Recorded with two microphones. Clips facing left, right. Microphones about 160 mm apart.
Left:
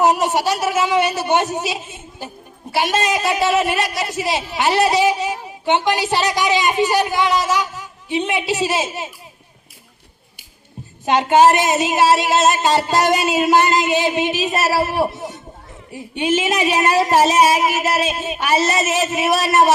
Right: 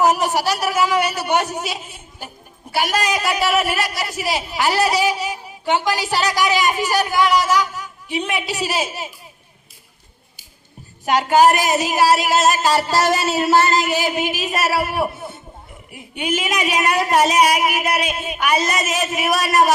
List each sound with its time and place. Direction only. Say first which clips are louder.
0.0 s speech: left 1 dB; 20° left (ahead or behind)
11.0 s speech: left 1 dB; 25° left (ahead or behind)